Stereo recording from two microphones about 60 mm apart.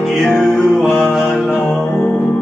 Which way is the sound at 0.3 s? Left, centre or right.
Left.